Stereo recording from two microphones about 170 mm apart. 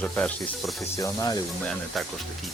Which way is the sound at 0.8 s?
20° left (ahead or behind).